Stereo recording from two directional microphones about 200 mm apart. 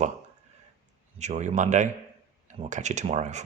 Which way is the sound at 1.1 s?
35° right (ahead or behind).